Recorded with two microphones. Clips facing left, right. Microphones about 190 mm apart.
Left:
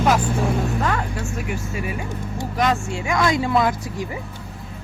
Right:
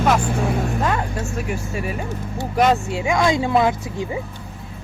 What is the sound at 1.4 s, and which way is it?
Speech, 40° right (ahead or behind).